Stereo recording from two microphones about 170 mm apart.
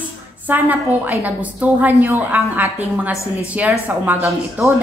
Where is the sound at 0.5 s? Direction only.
10° right (ahead or behind).